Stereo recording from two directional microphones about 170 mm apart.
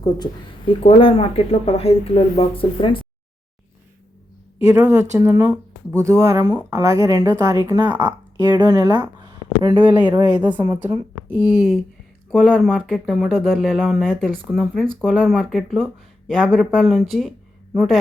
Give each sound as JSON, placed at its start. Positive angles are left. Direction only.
{"t": 0.0, "sound": "speech", "side_deg": 25}
{"t": 4.7, "sound": "speech", "side_deg": -15}